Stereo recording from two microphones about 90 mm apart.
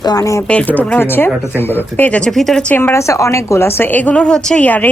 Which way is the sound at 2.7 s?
30° left (ahead or behind).